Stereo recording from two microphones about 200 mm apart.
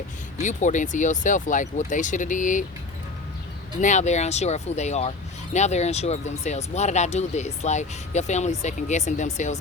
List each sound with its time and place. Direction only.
0.4 s speech: 40° left (ahead or behind)
3.8 s speech: 35° left (ahead or behind)